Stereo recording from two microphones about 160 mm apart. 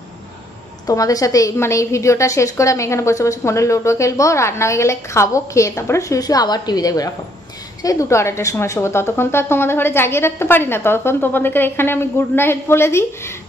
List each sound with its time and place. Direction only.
0.8 s a woman's voice: 20° left (ahead or behind)